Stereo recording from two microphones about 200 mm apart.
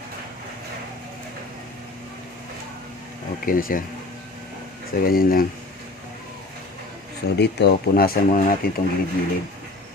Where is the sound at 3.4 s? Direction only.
45° left (ahead or behind).